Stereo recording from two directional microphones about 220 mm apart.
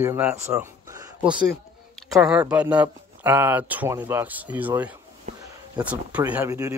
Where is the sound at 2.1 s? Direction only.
Centre (ahead or behind).